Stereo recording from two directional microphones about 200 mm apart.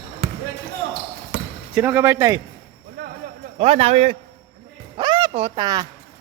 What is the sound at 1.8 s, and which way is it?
Speech, 10° right (ahead or behind).